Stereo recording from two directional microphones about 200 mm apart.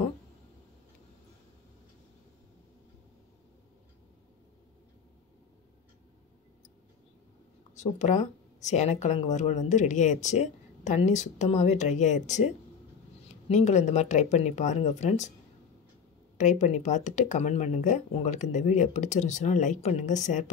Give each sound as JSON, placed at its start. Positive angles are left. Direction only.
{"t": 7.7, "sound": "speech", "side_deg": 35}
{"t": 13.5, "sound": "speech", "side_deg": 35}
{"t": 16.3, "sound": "speech", "side_deg": 35}